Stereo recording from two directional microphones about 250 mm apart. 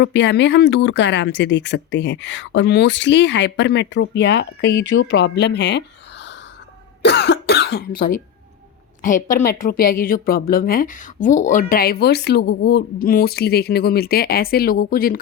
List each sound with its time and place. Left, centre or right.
0.0 s speech: left
9.0 s a sound: left
9.6 s a woman's voice: left